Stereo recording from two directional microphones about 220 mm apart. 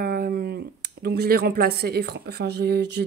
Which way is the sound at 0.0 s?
40° right (ahead or behind).